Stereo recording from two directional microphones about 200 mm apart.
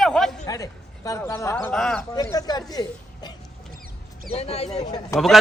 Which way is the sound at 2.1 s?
15° left (ahead or behind).